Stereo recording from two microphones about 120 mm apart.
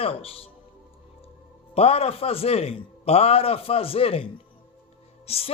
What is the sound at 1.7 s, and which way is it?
A man's voice, 55° left (ahead or behind).